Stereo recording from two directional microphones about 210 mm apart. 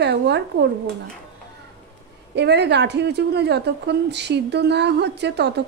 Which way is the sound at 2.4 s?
55° right (ahead or behind).